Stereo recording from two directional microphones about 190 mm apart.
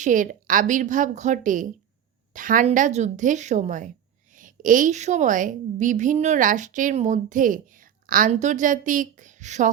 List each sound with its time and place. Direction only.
0.0 s a woman's voice: 45° right (ahead or behind)